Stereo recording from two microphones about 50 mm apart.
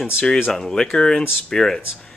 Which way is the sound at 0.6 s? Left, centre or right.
Centre.